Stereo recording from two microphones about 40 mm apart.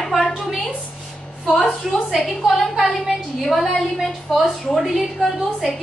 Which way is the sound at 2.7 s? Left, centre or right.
Centre.